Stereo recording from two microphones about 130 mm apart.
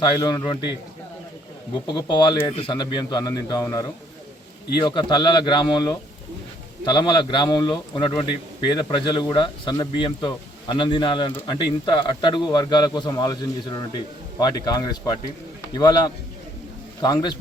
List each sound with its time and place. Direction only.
0.0 s speech: 30° left (ahead or behind)
1.9 s a man's voice: 35° left (ahead or behind)